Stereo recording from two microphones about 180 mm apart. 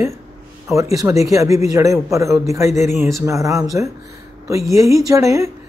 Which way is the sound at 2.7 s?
40° left (ahead or behind).